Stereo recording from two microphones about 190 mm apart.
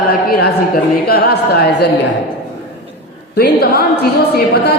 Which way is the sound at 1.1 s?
55° left (ahead or behind).